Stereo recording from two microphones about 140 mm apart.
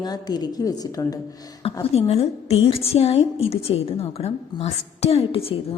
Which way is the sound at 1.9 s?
45° left (ahead or behind).